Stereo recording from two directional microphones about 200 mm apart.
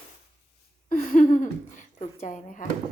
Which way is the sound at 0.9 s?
40° left (ahead or behind).